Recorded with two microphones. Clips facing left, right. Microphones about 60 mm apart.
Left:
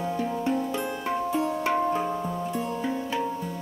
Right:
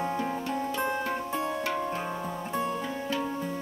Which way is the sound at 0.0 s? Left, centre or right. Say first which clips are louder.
Left 1 dB; right.